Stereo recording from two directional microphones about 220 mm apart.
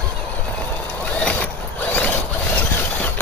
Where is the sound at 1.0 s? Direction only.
5° left (ahead or behind).